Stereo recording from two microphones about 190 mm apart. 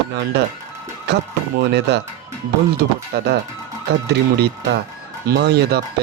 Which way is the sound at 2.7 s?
60° right (ahead or behind).